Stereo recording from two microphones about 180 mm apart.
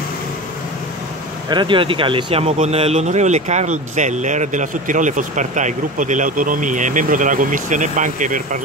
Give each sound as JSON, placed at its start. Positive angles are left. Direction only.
{"t": 1.5, "sound": "speech", "side_deg": -25}